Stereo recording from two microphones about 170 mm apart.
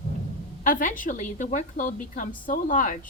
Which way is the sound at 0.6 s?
50° left (ahead or behind).